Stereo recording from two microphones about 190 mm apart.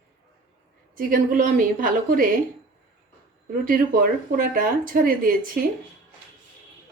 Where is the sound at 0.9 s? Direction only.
45° right (ahead or behind).